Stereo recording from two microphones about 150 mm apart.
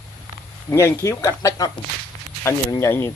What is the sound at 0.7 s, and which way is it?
A man's voice, 20° left (ahead or behind).